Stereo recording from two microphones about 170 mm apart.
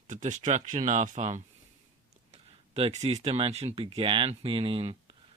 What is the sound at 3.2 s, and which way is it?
Speech, 35° right (ahead or behind).